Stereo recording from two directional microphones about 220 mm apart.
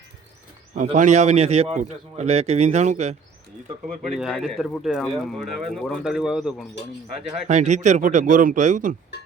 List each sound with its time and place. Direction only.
0.8 s speech: 35° right (ahead or behind)
4.1 s speech: centre (ahead or behind)
7.4 s speech: 35° right (ahead or behind)